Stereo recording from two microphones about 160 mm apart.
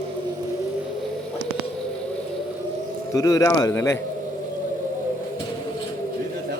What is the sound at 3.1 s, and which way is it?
Speech, 20° left (ahead or behind).